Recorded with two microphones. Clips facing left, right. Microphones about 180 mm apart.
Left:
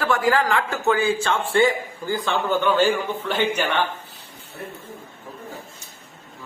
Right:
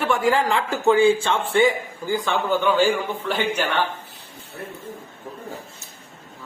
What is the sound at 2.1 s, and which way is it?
A man's voice, centre (ahead or behind).